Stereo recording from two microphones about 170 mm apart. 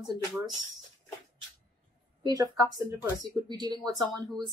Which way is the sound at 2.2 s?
20° right (ahead or behind).